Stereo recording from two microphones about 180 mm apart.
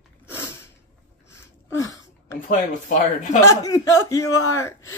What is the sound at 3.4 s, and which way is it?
A man's voice, 20° left (ahead or behind).